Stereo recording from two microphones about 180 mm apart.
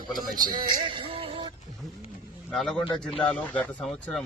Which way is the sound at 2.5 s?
Centre (ahead or behind).